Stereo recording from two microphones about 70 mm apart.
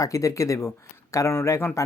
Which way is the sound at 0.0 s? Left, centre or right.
Left.